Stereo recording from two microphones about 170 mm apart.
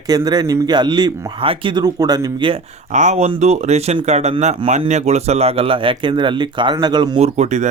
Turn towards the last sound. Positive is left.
turn(degrees=-40)  # may be behind; listen again after turning